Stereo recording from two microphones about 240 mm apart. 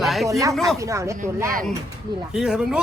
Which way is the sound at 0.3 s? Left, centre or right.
Centre.